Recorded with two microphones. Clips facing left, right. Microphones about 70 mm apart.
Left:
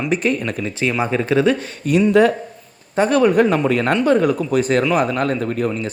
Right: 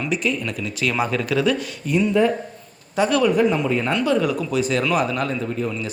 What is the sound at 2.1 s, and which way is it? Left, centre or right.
Speech, left.